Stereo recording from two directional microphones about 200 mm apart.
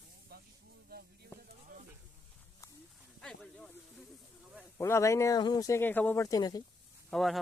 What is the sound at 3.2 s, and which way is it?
Speech, 5° left (ahead or behind).